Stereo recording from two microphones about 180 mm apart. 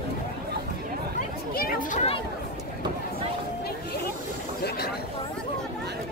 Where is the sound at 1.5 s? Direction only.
55° left (ahead or behind).